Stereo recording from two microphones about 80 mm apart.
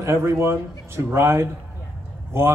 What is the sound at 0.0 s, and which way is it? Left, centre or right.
Speech, right.